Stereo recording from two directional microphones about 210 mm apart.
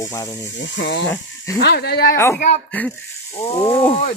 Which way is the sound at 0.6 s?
60° left (ahead or behind).